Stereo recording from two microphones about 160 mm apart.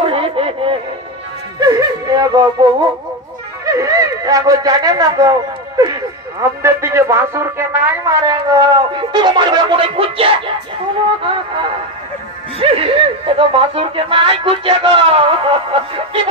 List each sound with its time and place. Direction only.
0.0 s music: 35° right (ahead or behind)
1.6 s a sound: 25° right (ahead or behind)
3.6 s speech: 20° right (ahead or behind)
12.5 s speech: 40° right (ahead or behind)